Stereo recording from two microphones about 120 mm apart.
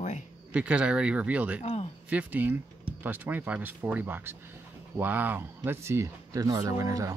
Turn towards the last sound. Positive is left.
turn(degrees=-25)  # may be behind; listen again after turning